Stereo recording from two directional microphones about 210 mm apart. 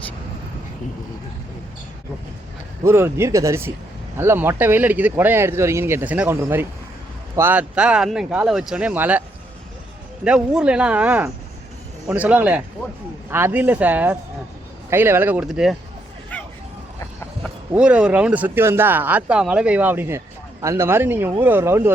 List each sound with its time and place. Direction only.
2.8 s speech: 10° right (ahead or behind)
10.2 s speech: 5° right (ahead or behind)
16.3 s hubbub: 5° left (ahead or behind)
17.7 s speech: 5° right (ahead or behind)